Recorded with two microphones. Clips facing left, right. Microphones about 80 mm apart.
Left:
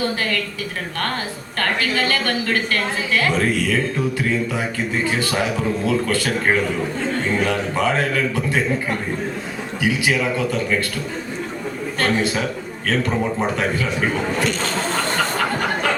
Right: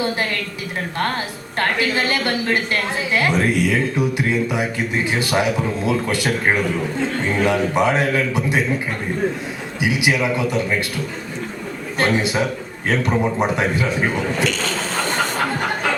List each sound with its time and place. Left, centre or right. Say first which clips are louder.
1.5 s a woman's voice: right 1 dB; right
9.8 s a woman's voice: right 1 dB; centre
11.9 s a woman's voice: right 2 dB; centre